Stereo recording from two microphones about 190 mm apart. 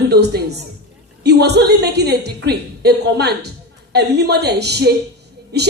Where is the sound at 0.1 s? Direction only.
55° right (ahead or behind).